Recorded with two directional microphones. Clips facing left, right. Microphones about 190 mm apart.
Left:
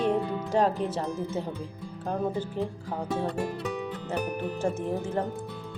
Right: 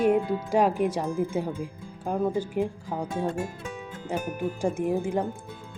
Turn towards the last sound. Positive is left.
turn(degrees=-10)  # may be behind; listen again after turning